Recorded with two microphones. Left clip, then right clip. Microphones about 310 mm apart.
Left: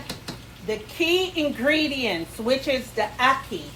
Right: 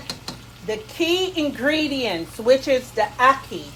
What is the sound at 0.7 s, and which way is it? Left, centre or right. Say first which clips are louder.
A woman's voice: right 1 dB; right.